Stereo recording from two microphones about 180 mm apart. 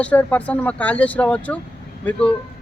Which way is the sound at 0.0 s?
10° left (ahead or behind).